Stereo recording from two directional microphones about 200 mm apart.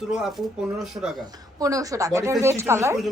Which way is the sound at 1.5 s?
15° right (ahead or behind).